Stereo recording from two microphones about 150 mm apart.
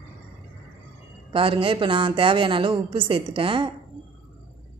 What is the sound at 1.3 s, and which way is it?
A woman's voice, 35° right (ahead or behind).